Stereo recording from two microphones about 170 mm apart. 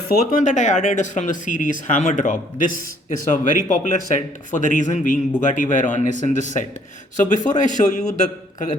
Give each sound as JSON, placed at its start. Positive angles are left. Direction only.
{"t": 0.1, "sound": "a man's voice", "side_deg": 55}